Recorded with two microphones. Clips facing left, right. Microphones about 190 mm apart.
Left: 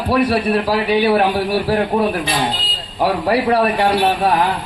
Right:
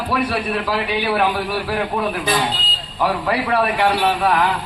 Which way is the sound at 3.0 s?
35° left (ahead or behind).